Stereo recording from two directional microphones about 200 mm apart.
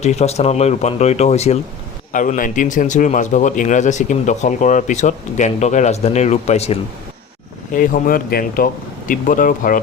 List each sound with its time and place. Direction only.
0.0 s a man's voice: 35° left (ahead or behind)